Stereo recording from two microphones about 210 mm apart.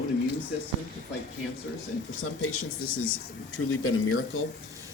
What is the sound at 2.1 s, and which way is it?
Speech, 75° left (ahead or behind).